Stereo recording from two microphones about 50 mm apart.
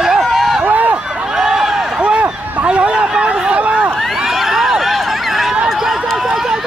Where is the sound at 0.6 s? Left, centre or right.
Right.